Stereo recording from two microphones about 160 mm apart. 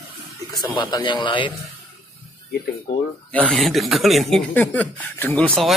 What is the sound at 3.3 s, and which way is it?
Speech, 5° left (ahead or behind).